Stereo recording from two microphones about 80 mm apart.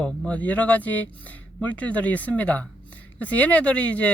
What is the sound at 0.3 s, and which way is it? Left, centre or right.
Speech, centre.